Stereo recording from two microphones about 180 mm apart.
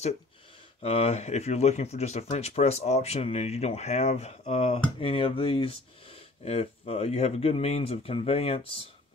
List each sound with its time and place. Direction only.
0.8 s speech: 35° left (ahead or behind)